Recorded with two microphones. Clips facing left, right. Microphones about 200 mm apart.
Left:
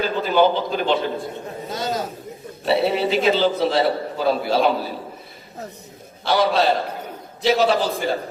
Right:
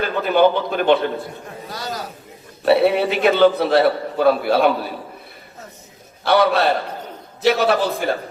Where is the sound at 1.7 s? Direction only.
20° left (ahead or behind).